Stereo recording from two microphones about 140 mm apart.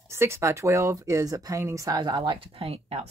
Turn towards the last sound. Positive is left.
turn(degrees=-45)  # may be behind; listen again after turning